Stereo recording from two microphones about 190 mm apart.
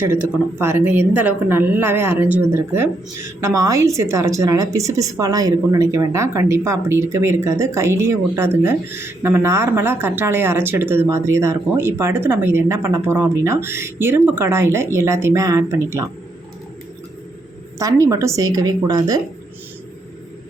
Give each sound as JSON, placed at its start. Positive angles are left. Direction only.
{"t": 0.6, "sound": "a woman's voice", "side_deg": -10}
{"t": 17.7, "sound": "a woman's voice", "side_deg": -15}